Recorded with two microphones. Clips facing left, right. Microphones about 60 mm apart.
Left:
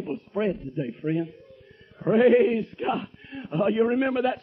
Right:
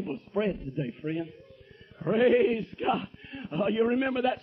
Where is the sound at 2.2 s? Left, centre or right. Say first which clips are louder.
Left 4 dB; centre.